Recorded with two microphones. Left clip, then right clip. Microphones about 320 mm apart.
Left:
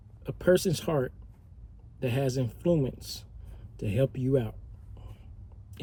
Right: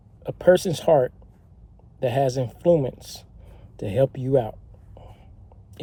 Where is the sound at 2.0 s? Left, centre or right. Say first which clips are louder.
Right 8 dB; right.